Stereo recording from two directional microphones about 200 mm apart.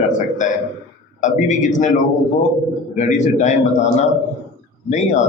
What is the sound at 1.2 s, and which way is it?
Speech, 40° left (ahead or behind).